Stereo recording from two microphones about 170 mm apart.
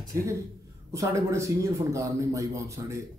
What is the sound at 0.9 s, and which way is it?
A man's voice, 15° right (ahead or behind).